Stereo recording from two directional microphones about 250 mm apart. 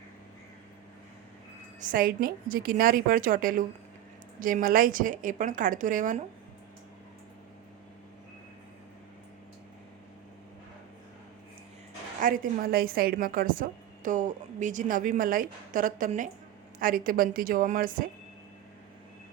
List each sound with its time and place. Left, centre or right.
1.8 s a woman's voice: right
12.2 s a woman's voice: right